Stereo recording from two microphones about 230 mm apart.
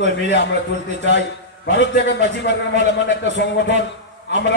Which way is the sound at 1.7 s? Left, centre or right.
Left.